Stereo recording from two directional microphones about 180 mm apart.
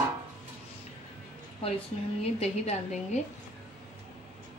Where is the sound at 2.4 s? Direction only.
35° left (ahead or behind).